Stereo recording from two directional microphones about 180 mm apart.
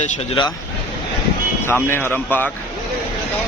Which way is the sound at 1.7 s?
10° left (ahead or behind).